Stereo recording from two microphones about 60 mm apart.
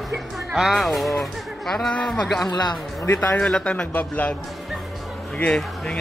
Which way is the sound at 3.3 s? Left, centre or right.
Centre.